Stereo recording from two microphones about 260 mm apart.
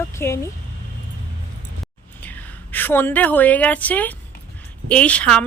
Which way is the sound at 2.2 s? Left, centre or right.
Centre.